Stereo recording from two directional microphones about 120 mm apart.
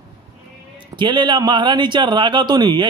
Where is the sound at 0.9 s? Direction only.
40° right (ahead or behind).